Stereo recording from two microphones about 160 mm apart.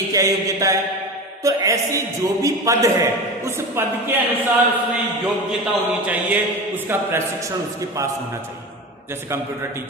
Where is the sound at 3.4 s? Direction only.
15° right (ahead or behind).